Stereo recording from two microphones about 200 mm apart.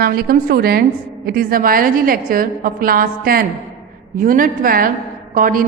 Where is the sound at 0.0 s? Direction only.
50° right (ahead or behind).